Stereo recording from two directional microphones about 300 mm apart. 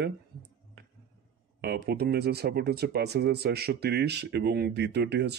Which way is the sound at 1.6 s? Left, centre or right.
Right.